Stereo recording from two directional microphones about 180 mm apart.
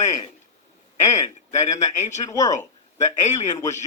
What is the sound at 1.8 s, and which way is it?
Speech, 40° left (ahead or behind).